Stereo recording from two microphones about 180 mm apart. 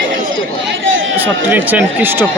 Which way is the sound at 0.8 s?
90° right.